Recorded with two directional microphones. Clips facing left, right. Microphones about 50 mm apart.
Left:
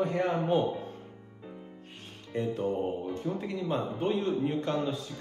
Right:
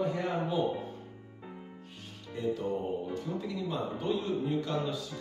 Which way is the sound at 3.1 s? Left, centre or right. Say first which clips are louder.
Left 2 dB; left.